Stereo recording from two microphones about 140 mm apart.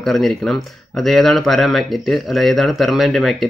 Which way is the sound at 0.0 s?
Centre (ahead or behind).